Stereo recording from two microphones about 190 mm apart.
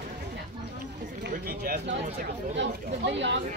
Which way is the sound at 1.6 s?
50° right (ahead or behind).